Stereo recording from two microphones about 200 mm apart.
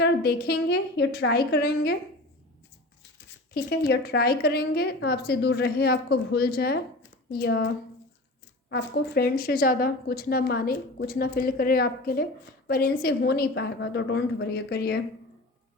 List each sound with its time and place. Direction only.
0.0 s a woman's voice: 55° left (ahead or behind)
3.2 s a woman's voice: 55° left (ahead or behind)
8.7 s speech: 50° left (ahead or behind)